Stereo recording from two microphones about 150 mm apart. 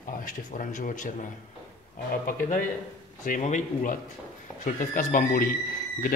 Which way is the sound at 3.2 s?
55° left (ahead or behind).